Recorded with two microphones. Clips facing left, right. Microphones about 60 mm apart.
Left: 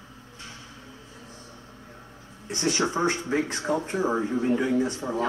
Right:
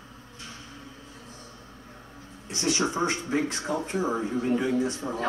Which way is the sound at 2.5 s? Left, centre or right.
Left.